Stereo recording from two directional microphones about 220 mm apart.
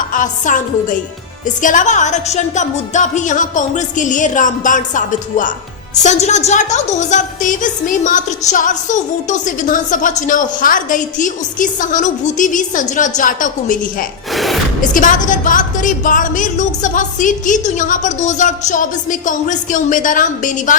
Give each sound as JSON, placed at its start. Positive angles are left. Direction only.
{"t": 0.1, "sound": "a woman's voice", "side_deg": 35}
{"t": 14.3, "sound": "gasp", "side_deg": 0}
{"t": 14.8, "sound": "a woman's voice", "side_deg": 35}